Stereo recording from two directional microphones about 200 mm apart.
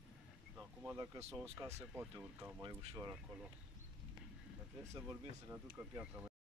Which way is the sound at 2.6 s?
20° right (ahead or behind).